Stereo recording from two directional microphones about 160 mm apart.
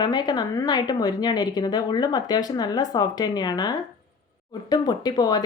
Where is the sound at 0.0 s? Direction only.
25° left (ahead or behind).